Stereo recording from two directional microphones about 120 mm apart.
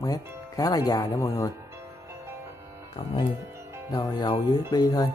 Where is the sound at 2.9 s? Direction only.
45° left (ahead or behind).